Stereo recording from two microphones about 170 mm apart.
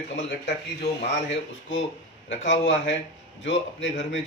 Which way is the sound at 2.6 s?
90° left.